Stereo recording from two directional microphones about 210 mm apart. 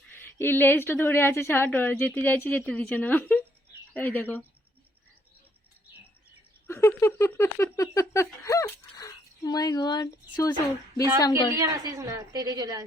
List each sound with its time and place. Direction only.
0.1 s a woman's voice: 10° left (ahead or behind)
6.7 s speech: 10° left (ahead or behind)
11.5 s a woman's voice: 15° right (ahead or behind)